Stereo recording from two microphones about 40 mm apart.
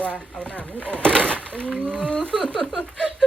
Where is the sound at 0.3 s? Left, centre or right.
Left.